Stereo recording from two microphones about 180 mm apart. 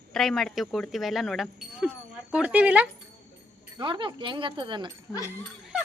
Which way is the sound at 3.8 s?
25° right (ahead or behind).